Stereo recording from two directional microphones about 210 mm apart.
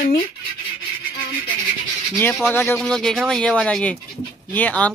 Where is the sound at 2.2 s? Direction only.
10° left (ahead or behind).